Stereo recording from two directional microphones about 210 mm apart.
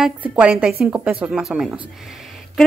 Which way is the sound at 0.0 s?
5° right (ahead or behind).